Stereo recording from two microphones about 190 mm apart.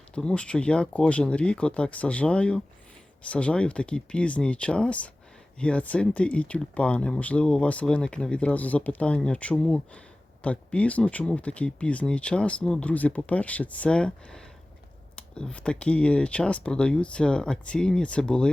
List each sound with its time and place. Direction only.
0.1 s speech: 5° left (ahead or behind)